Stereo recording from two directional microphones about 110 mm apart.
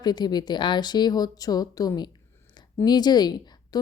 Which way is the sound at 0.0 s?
40° left (ahead or behind).